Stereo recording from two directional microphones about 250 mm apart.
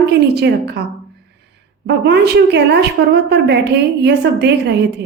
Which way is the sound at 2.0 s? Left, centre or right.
Right.